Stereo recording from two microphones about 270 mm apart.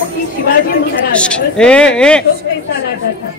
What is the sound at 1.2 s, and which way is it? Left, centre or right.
Speech, centre.